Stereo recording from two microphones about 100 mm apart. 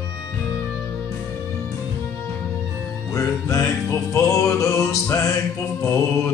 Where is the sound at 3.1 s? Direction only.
30° left (ahead or behind).